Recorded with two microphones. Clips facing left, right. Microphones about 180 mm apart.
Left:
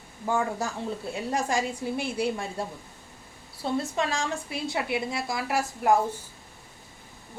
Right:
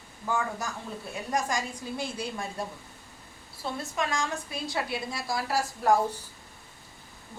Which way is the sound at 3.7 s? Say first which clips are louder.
Left 3 dB; 30° left (ahead or behind).